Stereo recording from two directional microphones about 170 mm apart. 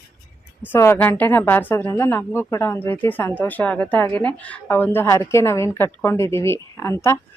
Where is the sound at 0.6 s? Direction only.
15° left (ahead or behind).